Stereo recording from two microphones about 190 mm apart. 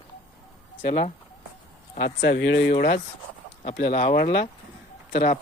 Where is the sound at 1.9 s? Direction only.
60° left (ahead or behind).